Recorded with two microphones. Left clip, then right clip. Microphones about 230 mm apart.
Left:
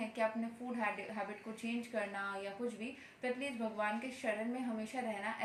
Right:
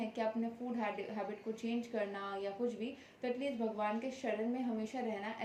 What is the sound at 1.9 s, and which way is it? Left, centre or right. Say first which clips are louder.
A woman's voice: left 2 dB; centre.